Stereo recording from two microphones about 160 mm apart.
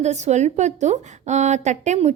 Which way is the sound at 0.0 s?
45° right (ahead or behind).